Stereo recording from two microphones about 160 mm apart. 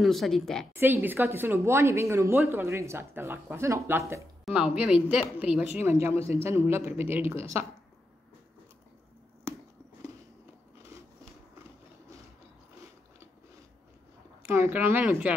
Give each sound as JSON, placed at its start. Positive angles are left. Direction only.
{"t": 0.0, "sound": "a woman's voice", "side_deg": 0}
{"t": 0.7, "sound": "speech", "side_deg": -15}
{"t": 9.5, "sound": "a sound", "side_deg": -15}
{"t": 14.4, "sound": "speech", "side_deg": -15}